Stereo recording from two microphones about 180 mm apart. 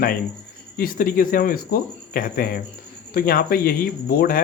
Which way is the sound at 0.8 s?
55° left (ahead or behind).